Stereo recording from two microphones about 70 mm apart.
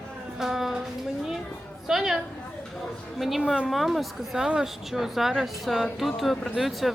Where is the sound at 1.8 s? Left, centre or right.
Centre.